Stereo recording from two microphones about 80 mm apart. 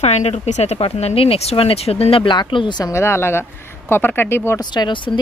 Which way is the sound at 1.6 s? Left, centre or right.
Left.